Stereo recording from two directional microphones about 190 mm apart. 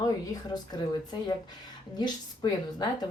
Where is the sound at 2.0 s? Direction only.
20° left (ahead or behind).